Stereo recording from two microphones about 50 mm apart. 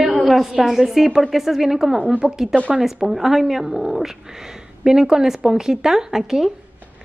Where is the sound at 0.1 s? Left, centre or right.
Centre.